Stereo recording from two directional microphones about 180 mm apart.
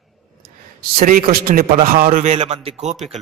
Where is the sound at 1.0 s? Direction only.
55° right (ahead or behind).